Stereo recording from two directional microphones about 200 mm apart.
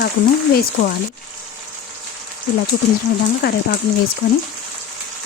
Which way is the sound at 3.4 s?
50° left (ahead or behind).